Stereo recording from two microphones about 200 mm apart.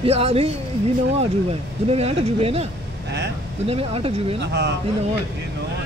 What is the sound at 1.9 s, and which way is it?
Speech, 30° right (ahead or behind).